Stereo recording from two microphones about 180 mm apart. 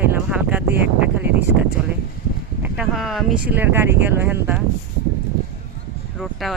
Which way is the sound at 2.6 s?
5° right (ahead or behind).